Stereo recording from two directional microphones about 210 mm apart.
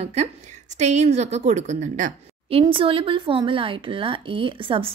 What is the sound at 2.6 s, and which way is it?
Speech, 25° right (ahead or behind).